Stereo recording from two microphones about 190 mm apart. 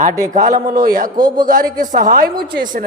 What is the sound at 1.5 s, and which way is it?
A man's voice, 45° right (ahead or behind).